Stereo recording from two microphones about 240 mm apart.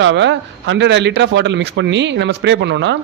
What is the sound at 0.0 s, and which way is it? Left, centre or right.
Speech, right.